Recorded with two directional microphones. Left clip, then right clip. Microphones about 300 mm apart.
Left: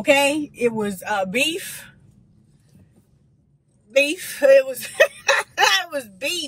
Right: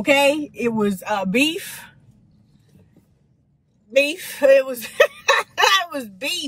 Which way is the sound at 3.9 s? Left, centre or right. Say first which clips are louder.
Even; centre.